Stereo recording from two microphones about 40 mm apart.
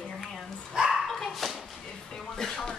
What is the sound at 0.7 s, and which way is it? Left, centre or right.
Bow-wow, centre.